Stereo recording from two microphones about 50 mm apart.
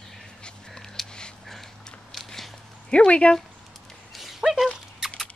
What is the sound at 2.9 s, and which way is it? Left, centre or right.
Speech, left.